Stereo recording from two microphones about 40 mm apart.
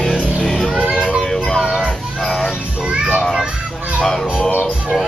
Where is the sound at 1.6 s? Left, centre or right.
Centre.